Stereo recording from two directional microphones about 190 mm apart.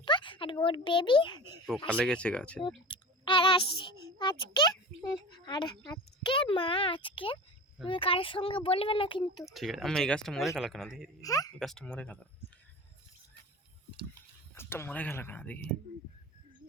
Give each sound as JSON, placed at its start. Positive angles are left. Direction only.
{"t": 0.0, "sound": "a child's voice", "side_deg": 25}
{"t": 1.9, "sound": "speech", "side_deg": 5}
{"t": 2.6, "sound": "clicking", "side_deg": 25}
{"t": 4.2, "sound": "a child's voice", "side_deg": 25}
{"t": 9.4, "sound": "speech", "side_deg": 0}
{"t": 11.2, "sound": "a child's voice", "side_deg": 20}
{"t": 11.6, "sound": "speech", "side_deg": 5}
{"t": 14.5, "sound": "speech", "side_deg": 10}